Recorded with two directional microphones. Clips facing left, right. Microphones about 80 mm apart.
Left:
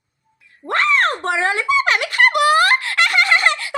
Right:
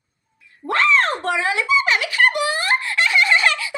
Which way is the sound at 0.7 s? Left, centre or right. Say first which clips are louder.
Even; left.